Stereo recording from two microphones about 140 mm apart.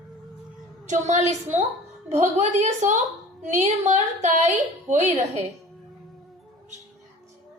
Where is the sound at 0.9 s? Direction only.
55° right (ahead or behind).